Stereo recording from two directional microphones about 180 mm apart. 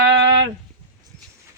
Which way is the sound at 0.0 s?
85° right.